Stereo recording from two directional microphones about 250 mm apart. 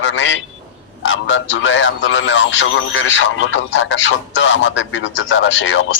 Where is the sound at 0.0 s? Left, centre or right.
Left.